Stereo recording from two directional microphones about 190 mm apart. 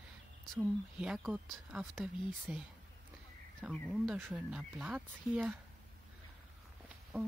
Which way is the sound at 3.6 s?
5° left (ahead or behind).